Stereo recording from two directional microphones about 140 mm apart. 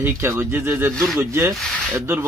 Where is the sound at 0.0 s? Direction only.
20° right (ahead or behind).